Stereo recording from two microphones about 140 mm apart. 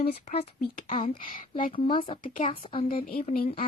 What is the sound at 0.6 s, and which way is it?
Speech, 70° left (ahead or behind).